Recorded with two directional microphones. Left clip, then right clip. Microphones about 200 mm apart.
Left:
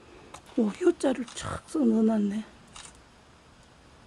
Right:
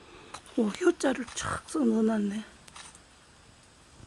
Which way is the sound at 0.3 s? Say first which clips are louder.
Left 1 dB; centre (ahead or behind).